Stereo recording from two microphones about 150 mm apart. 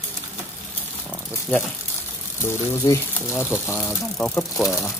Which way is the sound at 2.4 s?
20° left (ahead or behind).